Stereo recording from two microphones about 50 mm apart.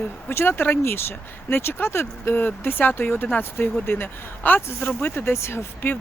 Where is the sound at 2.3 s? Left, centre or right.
Left.